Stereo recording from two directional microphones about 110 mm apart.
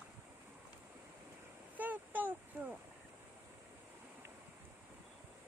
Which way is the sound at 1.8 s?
15° right (ahead or behind).